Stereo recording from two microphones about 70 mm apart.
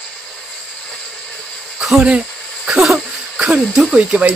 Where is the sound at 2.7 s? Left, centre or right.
Centre.